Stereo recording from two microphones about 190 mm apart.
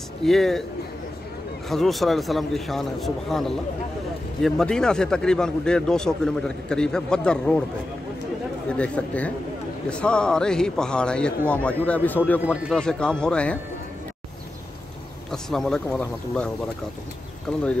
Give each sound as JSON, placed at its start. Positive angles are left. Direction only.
{"t": 0.2, "sound": "speech", "side_deg": 0}
{"t": 1.7, "sound": "speech", "side_deg": 0}
{"t": 8.6, "sound": "speech", "side_deg": 5}
{"t": 15.3, "sound": "speech", "side_deg": 5}
{"t": 17.5, "sound": "speech", "side_deg": 5}